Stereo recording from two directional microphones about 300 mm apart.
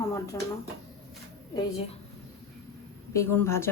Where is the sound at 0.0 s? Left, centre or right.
Centre.